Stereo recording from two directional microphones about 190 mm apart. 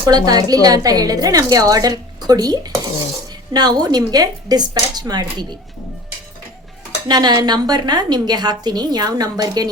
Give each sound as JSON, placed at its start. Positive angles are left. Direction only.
{"t": 0.0, "sound": "a woman's voice", "side_deg": -20}
{"t": 7.1, "sound": "a woman's voice", "side_deg": -20}